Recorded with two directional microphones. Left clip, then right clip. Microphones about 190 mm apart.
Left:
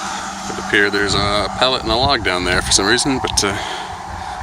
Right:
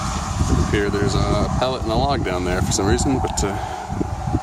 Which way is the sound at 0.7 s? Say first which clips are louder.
Left 8 dB; 5° right (ahead or behind).